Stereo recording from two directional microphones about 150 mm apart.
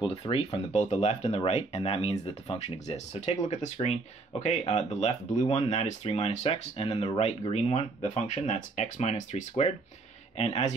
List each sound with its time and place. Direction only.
0.0 s speech: 35° left (ahead or behind)